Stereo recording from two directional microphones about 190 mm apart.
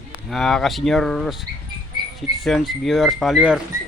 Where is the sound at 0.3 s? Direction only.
Centre (ahead or behind).